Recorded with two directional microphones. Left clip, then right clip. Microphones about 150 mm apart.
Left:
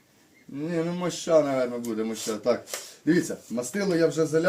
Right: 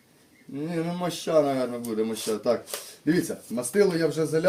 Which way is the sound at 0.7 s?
25° right (ahead or behind).